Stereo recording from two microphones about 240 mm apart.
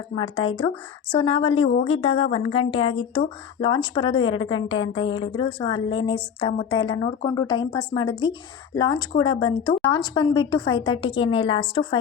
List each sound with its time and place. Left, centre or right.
0.3 s speech: left
1.1 s a woman's voice: left